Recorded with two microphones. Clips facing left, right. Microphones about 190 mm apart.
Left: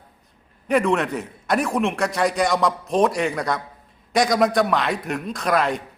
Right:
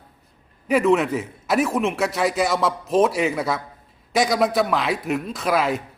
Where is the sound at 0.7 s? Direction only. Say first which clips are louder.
Right 2 dB; centre (ahead or behind).